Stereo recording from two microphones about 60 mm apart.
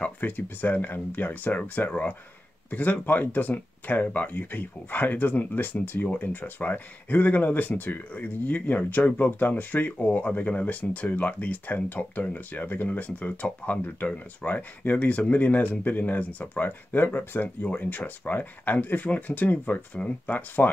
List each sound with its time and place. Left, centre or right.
0.0 s speech: left